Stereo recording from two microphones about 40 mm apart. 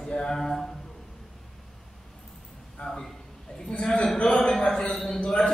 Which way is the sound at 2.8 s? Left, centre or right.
Centre.